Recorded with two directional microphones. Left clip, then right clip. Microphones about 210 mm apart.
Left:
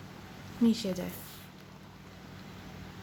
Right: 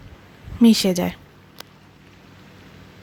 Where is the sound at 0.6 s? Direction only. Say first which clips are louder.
Right 13 dB; 45° right (ahead or behind).